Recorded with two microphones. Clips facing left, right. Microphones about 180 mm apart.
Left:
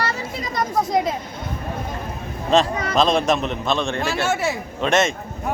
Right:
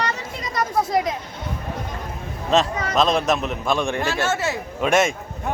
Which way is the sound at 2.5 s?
5° right (ahead or behind).